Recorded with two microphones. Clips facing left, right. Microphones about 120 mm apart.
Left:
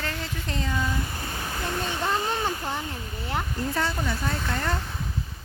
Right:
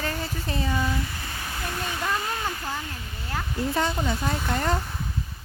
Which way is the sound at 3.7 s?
20° right (ahead or behind).